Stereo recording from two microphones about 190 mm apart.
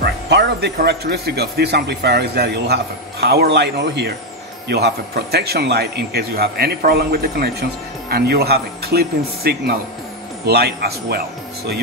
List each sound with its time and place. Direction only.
0.0 s speech: 60° right (ahead or behind)